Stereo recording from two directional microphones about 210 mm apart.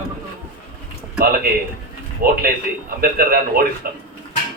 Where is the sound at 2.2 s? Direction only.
45° right (ahead or behind).